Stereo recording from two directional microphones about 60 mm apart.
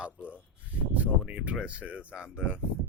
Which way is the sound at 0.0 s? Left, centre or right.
Right.